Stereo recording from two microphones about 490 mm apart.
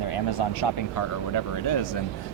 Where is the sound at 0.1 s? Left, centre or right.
Left.